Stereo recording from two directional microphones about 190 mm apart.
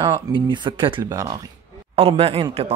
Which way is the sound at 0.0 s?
25° right (ahead or behind).